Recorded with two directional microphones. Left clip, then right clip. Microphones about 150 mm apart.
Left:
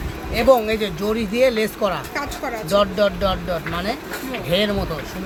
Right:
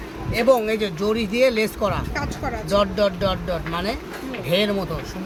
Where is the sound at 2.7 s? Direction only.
25° right (ahead or behind).